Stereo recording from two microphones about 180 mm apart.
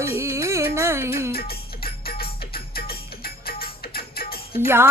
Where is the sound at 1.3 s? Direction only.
60° left (ahead or behind).